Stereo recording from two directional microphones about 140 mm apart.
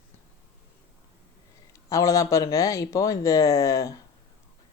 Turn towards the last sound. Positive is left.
turn(degrees=25)  # may be behind; listen again after turning